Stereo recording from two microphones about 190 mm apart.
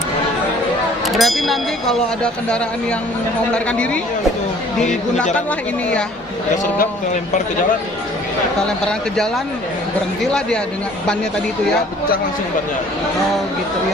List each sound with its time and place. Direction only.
1.0 s speech: centre (ahead or behind)
6.7 s speech: 40° left (ahead or behind)